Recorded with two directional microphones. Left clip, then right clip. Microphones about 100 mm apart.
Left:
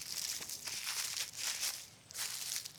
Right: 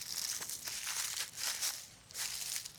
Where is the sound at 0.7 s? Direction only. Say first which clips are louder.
Even; 10° right (ahead or behind).